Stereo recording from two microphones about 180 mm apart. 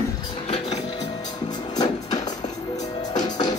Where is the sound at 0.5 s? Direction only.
35° left (ahead or behind).